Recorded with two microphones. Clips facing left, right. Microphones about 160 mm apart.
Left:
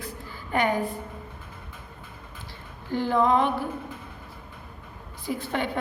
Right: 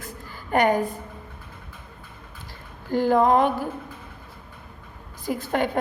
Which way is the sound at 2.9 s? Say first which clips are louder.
Right 4 dB; 45° right (ahead or behind).